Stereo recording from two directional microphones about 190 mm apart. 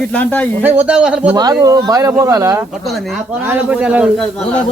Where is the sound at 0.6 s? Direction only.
5° right (ahead or behind).